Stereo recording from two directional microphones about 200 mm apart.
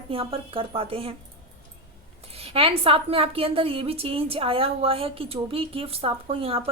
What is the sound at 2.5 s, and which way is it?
Speech, 30° right (ahead or behind).